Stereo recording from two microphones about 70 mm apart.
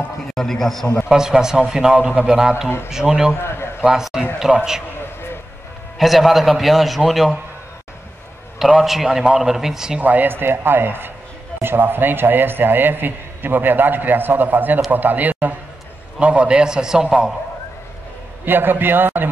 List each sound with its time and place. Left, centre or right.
0.3 s a sound: centre
1.0 s a man's voice: centre
3.3 s a sound: left
3.8 s a man's voice: centre
5.9 s a man's voice: centre
8.5 s a man's voice: centre
9.9 s a man's voice: right
18.4 s a man's voice: right